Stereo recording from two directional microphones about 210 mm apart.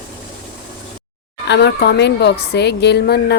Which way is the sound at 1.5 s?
55° left (ahead or behind).